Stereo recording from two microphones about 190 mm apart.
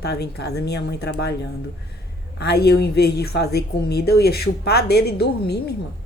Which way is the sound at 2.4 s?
60° left (ahead or behind).